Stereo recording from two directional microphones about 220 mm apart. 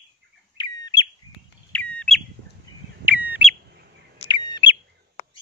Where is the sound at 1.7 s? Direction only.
5° left (ahead or behind).